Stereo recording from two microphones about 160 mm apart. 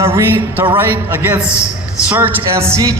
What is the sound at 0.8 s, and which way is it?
A man's voice, 10° right (ahead or behind).